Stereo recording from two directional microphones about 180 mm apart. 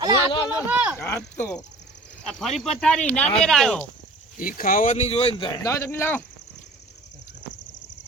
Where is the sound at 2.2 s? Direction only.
Centre (ahead or behind).